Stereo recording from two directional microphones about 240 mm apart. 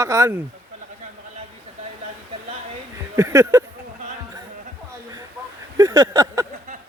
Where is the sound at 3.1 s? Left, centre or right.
Centre.